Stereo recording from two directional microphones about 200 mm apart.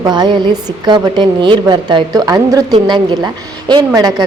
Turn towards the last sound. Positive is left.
turn(degrees=-20)  # may be behind; listen again after turning